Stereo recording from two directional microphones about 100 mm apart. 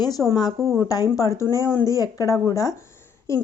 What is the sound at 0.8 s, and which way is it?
A woman's voice, 35° left (ahead or behind).